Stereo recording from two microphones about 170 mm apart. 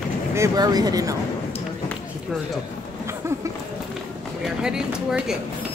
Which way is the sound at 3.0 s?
15° right (ahead or behind).